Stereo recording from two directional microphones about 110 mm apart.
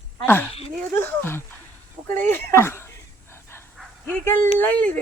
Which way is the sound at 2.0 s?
20° left (ahead or behind).